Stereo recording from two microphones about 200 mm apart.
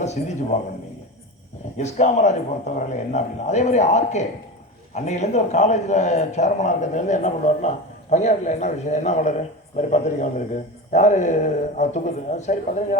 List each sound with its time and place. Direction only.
0.0 s a man's voice: 35° left (ahead or behind)
1.8 s a man's voice: 35° left (ahead or behind)